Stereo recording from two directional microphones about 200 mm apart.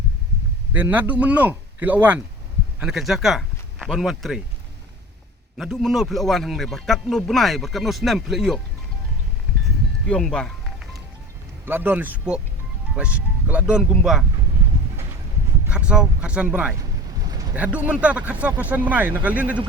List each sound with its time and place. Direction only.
0.7 s speech: 10° right (ahead or behind)
5.5 s a man's voice: centre (ahead or behind)
10.1 s music: 5° left (ahead or behind)
11.6 s a man's voice: 10° right (ahead or behind)
15.6 s speech: 5° right (ahead or behind)
17.2 s a sound: 20° right (ahead or behind)
17.5 s speech: 5° right (ahead or behind)